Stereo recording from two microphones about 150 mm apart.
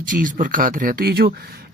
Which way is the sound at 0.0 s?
65° right (ahead or behind).